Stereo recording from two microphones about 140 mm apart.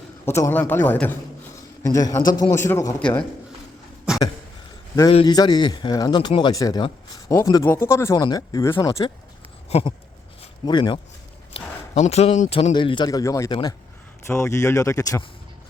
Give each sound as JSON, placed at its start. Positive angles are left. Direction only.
{"t": 0.3, "sound": "speech", "side_deg": 20}
{"t": 1.8, "sound": "speech", "side_deg": 25}
{"t": 3.0, "sound": "speech", "side_deg": 10}
{"t": 5.0, "sound": "speech", "side_deg": 30}
{"t": 9.6, "sound": "a sound", "side_deg": 45}
{"t": 10.7, "sound": "speech", "side_deg": 35}
{"t": 11.5, "sound": "a man's voice", "side_deg": 50}
{"t": 13.1, "sound": "speech", "side_deg": 25}
{"t": 13.5, "sound": "speech", "side_deg": 30}
{"t": 14.3, "sound": "speech", "side_deg": 20}